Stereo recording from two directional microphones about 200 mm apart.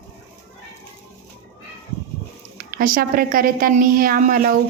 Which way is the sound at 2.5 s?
45° right (ahead or behind).